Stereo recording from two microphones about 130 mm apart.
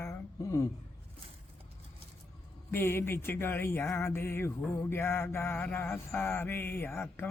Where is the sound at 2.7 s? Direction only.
20° left (ahead or behind).